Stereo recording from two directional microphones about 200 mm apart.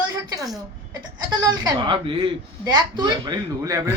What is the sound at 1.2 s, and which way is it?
Speech, 20° right (ahead or behind).